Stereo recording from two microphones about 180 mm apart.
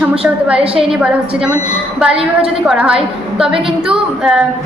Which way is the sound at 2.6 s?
5° right (ahead or behind).